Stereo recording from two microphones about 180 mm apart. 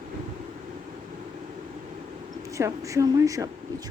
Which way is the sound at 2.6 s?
15° right (ahead or behind).